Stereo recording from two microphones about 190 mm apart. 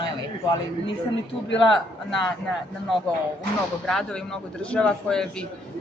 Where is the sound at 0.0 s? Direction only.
20° left (ahead or behind).